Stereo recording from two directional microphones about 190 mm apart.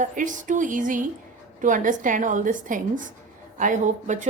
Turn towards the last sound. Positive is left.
turn(degrees=-40)  # may be behind; listen again after turning